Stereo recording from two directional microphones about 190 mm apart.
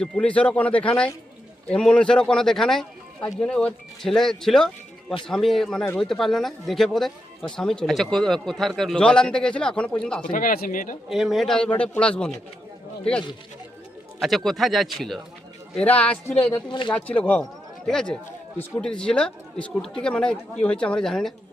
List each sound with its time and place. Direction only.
0.0 s speech: 5° left (ahead or behind)
10.3 s speech: 50° left (ahead or behind)
11.1 s speech: centre (ahead or behind)
14.2 s speech: centre (ahead or behind)
16.6 s speech: 25° left (ahead or behind)
16.9 s speech: 5° left (ahead or behind)